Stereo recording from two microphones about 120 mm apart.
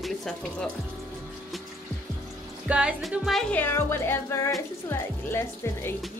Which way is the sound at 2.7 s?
10° right (ahead or behind).